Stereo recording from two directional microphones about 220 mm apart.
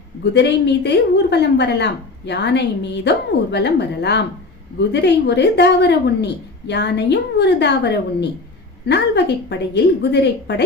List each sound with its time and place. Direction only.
0.3 s a woman's voice: 50° left (ahead or behind)